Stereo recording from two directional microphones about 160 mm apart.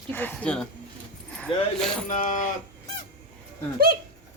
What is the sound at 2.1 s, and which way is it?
Speech, 55° left (ahead or behind).